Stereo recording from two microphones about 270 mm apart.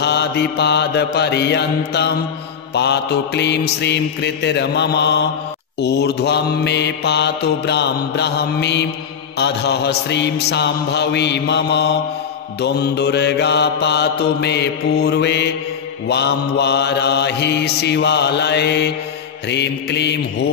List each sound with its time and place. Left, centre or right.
0.0 s mantra: left